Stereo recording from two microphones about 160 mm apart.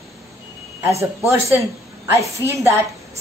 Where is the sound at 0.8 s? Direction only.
15° right (ahead or behind).